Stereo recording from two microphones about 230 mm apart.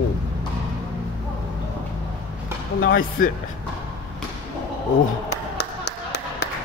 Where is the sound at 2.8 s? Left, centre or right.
Left.